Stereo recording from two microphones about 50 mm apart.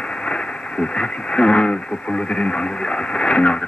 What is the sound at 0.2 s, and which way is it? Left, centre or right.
Speech, centre.